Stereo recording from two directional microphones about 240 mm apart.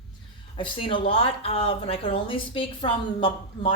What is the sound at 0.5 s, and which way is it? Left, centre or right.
Speech, left.